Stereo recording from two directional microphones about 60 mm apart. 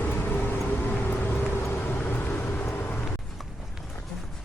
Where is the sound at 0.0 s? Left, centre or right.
Left.